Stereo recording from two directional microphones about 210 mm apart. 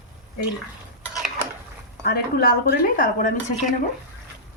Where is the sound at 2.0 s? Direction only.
45° left (ahead or behind).